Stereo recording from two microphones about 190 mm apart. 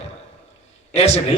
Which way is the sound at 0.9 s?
35° left (ahead or behind).